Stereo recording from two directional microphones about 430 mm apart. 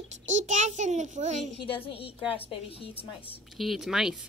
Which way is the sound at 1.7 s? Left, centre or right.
Centre.